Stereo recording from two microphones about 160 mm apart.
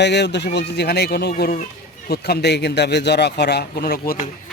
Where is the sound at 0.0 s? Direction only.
90° left.